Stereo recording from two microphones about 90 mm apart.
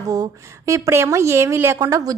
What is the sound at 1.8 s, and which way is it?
Speech, 40° right (ahead or behind).